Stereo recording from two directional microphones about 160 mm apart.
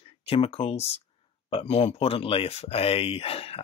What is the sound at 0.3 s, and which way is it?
Speech, 35° left (ahead or behind).